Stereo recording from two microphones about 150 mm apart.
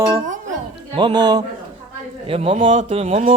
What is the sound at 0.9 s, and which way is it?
Speech, 30° right (ahead or behind).